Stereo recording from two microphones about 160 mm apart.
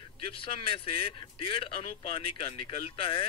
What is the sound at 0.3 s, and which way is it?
Speech, 35° left (ahead or behind).